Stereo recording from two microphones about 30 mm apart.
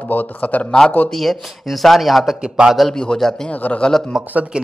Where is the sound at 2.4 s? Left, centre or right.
Right.